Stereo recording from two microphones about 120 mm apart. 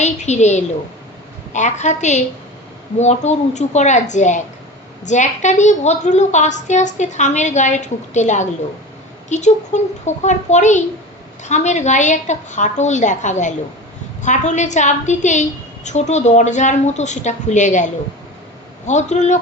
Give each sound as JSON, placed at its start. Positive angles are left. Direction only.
{"t": 0.0, "sound": "a child's voice", "side_deg": 75}
{"t": 18.9, "sound": "a child's voice", "side_deg": 75}